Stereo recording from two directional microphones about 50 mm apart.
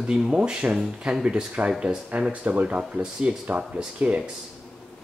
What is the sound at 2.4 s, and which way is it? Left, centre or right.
Speech, right.